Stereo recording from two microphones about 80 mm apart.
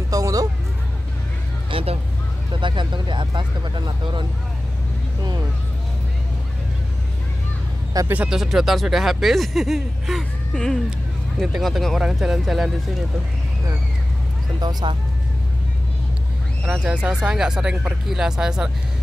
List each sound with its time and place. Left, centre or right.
0.1 s music: right
2.5 s speech: right
8.0 s speech: right
8.3 s speech: centre
10.5 s speech: centre
11.3 s speech: centre
14.6 s speech: right
16.7 s speech: centre